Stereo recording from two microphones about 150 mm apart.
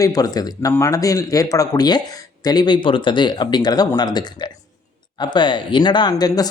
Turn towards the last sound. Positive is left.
turn(degrees=25)  # may be behind; listen again after turning